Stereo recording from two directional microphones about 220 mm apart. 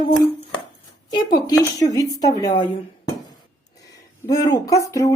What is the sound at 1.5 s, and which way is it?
Speech, 15° left (ahead or behind).